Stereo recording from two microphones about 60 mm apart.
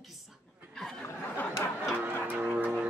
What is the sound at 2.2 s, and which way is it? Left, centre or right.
Music, right.